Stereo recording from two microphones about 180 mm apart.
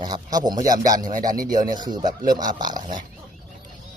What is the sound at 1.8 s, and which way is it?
Speech, 25° right (ahead or behind).